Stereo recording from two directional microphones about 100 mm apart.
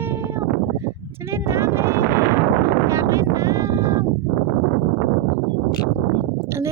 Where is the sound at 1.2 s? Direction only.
25° right (ahead or behind).